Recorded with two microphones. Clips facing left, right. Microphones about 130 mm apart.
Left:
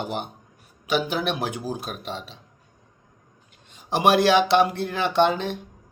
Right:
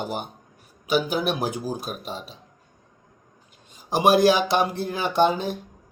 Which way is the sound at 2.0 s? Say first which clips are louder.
Left 1 dB; 40° right (ahead or behind).